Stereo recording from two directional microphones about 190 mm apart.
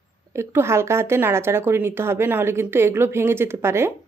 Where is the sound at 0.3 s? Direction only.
15° right (ahead or behind).